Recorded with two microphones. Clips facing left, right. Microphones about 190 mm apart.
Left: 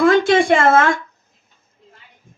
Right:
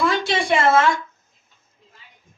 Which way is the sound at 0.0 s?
50° left (ahead or behind).